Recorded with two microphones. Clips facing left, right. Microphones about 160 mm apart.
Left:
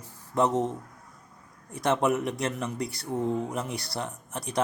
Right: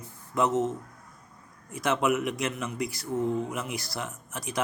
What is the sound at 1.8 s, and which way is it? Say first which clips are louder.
Speech: left 1 dB; 35° left (ahead or behind).